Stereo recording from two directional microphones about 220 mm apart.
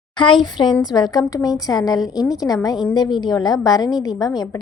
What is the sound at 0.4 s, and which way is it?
A woman's voice, 20° left (ahead or behind).